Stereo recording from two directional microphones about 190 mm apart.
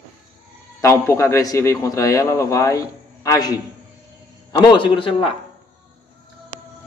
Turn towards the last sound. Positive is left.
turn(degrees=30)  # may be behind; listen again after turning